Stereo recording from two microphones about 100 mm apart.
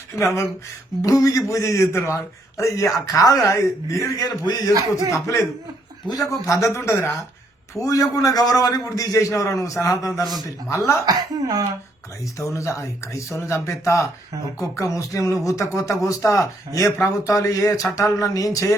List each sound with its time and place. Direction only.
0.2 s a man's voice: 30° left (ahead or behind)
4.7 s speech: 35° right (ahead or behind)
5.1 s a man's voice: 30° left (ahead or behind)
11.0 s speech: 40° right (ahead or behind)
12.4 s a man's voice: 30° left (ahead or behind)